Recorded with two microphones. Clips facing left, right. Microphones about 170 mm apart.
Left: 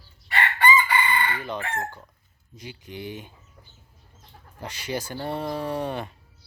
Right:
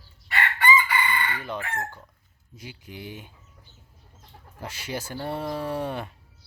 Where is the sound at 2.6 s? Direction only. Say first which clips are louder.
Left 3 dB; 5° right (ahead or behind).